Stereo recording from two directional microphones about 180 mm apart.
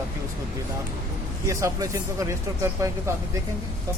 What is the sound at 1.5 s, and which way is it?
Speech, 15° right (ahead or behind).